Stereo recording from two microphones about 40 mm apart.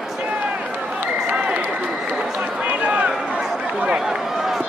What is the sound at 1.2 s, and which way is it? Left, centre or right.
Frog, right.